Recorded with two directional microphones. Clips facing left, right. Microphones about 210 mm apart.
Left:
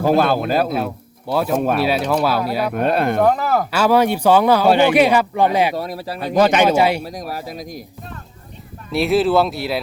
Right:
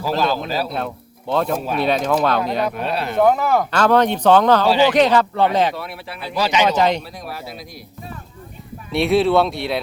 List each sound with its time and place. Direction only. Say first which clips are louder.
0.0 s speech: left 5 dB; 55° left (ahead or behind)
1.3 s speech: left 2 dB; 5° left (ahead or behind)
2.7 s speech: left 6 dB; 50° left (ahead or behind)
3.2 s speech: right 1 dB; centre (ahead or behind)
5.7 s speech: left 6 dB; 40° left (ahead or behind)
6.7 s speech: left 2 dB; 10° left (ahead or behind)
7.0 s speech: left 4 dB; 40° left (ahead or behind)
8.9 s speech: even; centre (ahead or behind)